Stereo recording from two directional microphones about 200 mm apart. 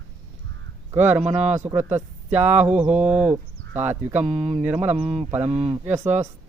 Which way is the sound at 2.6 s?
5° right (ahead or behind).